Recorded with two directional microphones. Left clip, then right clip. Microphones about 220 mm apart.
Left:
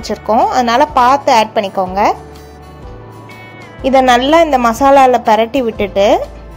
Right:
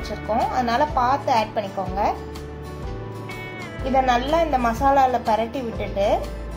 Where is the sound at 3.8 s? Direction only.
45° left (ahead or behind).